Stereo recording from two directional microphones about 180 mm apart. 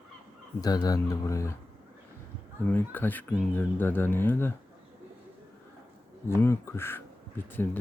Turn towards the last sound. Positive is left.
turn(degrees=10)  # may be behind; listen again after turning